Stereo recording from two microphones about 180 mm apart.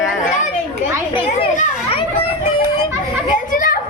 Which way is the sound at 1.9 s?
30° left (ahead or behind).